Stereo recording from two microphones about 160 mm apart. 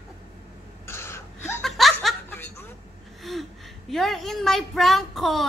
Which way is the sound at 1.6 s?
Centre (ahead or behind).